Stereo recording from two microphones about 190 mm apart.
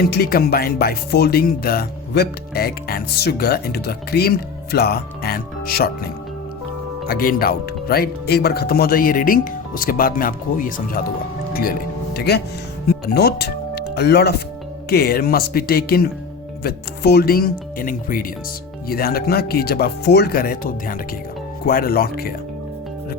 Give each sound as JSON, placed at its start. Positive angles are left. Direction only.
{"t": 0.0, "sound": "music", "side_deg": 55}
{"t": 7.1, "sound": "speech", "side_deg": 50}